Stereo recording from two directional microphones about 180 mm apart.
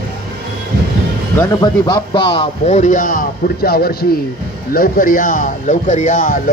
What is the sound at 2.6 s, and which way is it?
A man's voice, 40° left (ahead or behind).